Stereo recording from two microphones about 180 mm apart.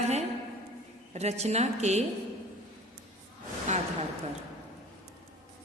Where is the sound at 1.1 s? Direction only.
35° right (ahead or behind).